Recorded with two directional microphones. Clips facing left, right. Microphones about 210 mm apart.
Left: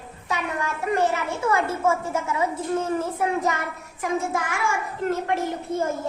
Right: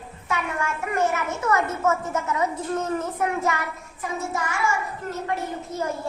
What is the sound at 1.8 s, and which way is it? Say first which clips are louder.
A woman's voice: even; 10° left (ahead or behind).